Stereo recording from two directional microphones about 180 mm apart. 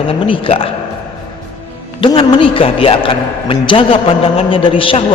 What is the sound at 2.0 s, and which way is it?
A man's voice, 30° left (ahead or behind).